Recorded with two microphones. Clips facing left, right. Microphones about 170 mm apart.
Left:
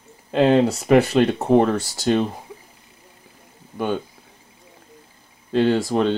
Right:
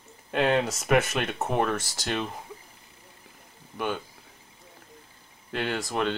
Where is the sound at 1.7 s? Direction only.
Centre (ahead or behind).